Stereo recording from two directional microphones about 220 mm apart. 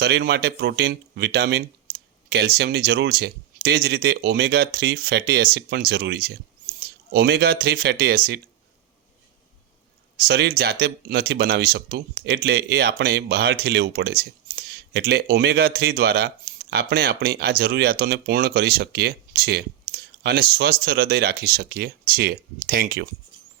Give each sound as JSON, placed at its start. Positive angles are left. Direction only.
{"t": 0.0, "sound": "speech", "side_deg": -50}
{"t": 10.2, "sound": "speech", "side_deg": -45}